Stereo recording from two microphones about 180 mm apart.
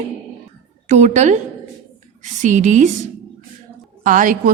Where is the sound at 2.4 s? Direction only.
45° right (ahead or behind).